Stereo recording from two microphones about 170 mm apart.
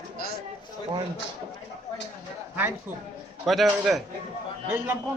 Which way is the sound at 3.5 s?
Centre (ahead or behind).